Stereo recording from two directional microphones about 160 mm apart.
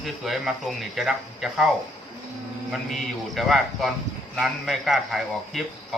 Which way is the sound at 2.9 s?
Centre (ahead or behind).